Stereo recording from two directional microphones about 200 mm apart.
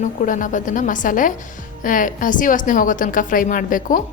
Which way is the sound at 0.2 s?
40° left (ahead or behind).